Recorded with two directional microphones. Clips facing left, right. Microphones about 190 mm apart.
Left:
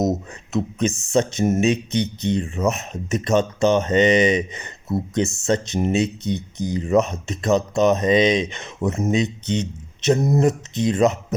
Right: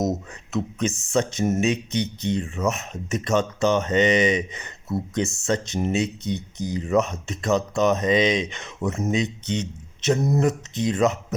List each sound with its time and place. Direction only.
0.0 s speech: 20° left (ahead or behind)